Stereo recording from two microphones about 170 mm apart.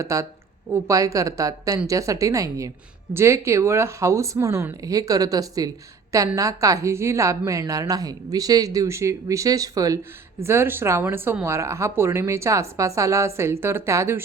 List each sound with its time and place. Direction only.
0.0 s speech: 20° right (ahead or behind)